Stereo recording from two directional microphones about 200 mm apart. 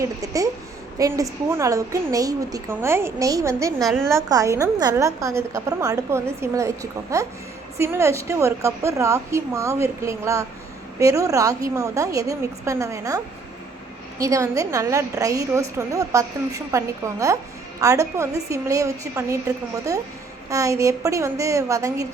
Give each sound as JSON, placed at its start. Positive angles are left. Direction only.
{"t": 0.0, "sound": "a woman's voice", "side_deg": -15}
{"t": 3.8, "sound": "a woman's voice", "side_deg": 0}
{"t": 4.1, "sound": "a woman's voice", "side_deg": -15}